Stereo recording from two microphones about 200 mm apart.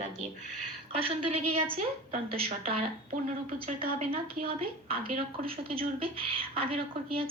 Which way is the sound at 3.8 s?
30° right (ahead or behind).